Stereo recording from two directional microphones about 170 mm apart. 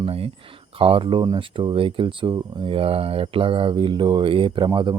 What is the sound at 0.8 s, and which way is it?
Speech, 30° right (ahead or behind).